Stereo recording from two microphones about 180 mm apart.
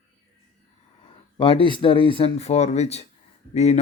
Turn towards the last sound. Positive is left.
turn(degrees=40)  # may be behind; listen again after turning